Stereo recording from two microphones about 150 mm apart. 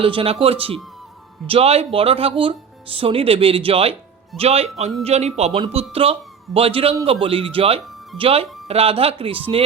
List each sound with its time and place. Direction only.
0.0 s speech: 40° right (ahead or behind)